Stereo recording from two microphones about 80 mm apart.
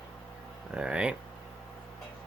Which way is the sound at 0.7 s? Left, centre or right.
Centre.